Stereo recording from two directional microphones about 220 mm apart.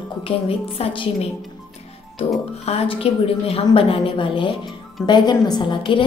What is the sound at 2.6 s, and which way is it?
Speech, 25° left (ahead or behind).